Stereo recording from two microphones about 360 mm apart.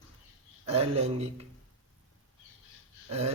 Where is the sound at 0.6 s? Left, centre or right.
Centre.